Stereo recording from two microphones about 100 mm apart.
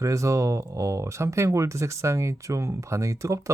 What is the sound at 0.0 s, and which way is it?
Speech, 30° right (ahead or behind).